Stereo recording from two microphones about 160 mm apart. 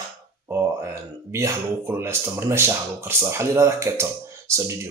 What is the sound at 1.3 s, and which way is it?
Speech, 15° right (ahead or behind).